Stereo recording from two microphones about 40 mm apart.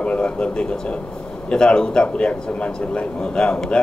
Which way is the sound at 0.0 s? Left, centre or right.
Left.